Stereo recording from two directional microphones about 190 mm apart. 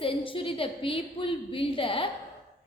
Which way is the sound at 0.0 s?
30° left (ahead or behind).